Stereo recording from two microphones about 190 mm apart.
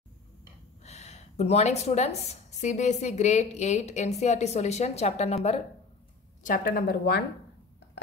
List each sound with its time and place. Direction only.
0.8 s a woman's voice: 35° left (ahead or behind)
6.4 s speech: 45° left (ahead or behind)